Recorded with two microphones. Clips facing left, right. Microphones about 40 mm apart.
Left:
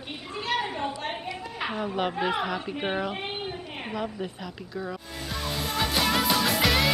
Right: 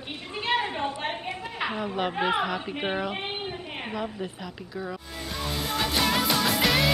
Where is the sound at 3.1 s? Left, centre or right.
Centre.